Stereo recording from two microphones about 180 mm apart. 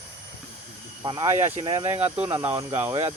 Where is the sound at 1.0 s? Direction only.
20° right (ahead or behind).